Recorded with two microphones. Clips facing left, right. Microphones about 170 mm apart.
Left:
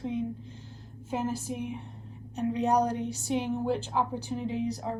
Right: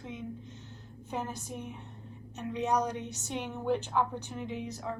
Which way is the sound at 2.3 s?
35° left (ahead or behind).